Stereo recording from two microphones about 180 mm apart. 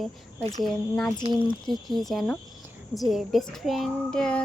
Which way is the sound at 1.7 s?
Centre (ahead or behind).